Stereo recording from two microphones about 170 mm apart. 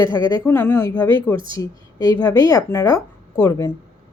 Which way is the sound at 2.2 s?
20° left (ahead or behind).